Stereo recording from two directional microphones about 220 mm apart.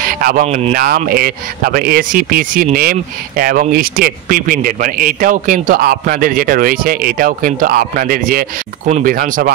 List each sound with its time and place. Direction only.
0.0 s speech: 40° right (ahead or behind)
0.8 s speech: 40° right (ahead or behind)